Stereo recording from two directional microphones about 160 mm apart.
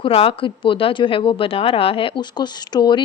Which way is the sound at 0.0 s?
35° left (ahead or behind).